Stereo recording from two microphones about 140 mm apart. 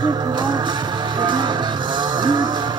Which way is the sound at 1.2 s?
35° right (ahead or behind).